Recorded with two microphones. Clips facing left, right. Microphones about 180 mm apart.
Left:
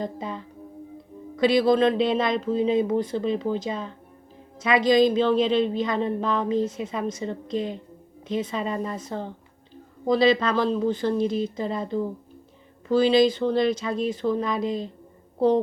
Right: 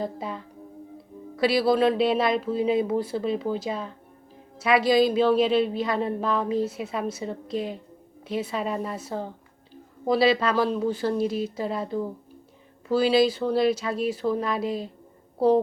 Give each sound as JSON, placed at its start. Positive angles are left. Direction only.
{"t": 0.0, "sound": "a woman's voice", "side_deg": -5}